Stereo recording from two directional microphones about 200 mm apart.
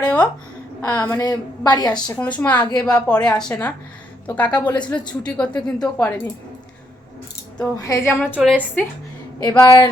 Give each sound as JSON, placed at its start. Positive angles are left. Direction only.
{"t": 0.0, "sound": "a sound", "side_deg": 5}
{"t": 0.9, "sound": "a woman's voice", "side_deg": 15}
{"t": 2.1, "sound": "a woman's voice", "side_deg": 5}
{"t": 7.8, "sound": "speech", "side_deg": 15}
{"t": 8.4, "sound": "a woman's voice", "side_deg": -5}
{"t": 9.4, "sound": "speech", "side_deg": 15}